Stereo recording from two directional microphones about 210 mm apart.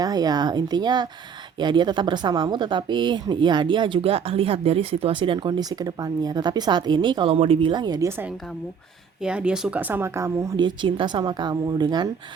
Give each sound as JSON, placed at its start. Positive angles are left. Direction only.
{"t": 0.0, "sound": "speech", "side_deg": -20}
{"t": 9.2, "sound": "speech", "side_deg": -5}